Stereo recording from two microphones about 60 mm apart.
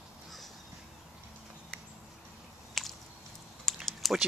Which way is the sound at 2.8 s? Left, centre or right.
Centre.